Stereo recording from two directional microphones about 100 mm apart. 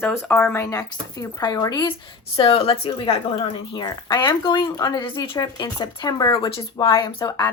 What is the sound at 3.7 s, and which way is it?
Speech, 45° left (ahead or behind).